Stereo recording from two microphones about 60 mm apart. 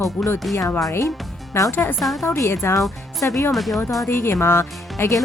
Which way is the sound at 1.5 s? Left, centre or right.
Left.